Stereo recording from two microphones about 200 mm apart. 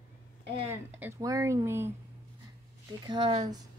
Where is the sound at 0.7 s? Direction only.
10° right (ahead or behind).